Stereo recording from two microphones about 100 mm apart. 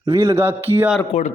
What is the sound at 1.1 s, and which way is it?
Speech, 90° left.